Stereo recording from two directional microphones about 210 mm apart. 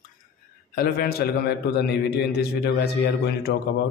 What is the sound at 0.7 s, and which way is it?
A man's voice, 50° left (ahead or behind).